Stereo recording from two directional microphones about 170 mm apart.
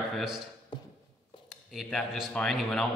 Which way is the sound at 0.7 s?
25° left (ahead or behind).